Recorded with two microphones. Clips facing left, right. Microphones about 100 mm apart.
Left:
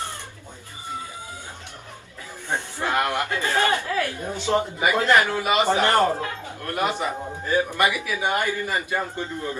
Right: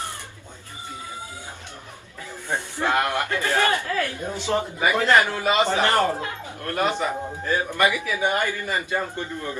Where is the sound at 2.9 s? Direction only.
20° left (ahead or behind).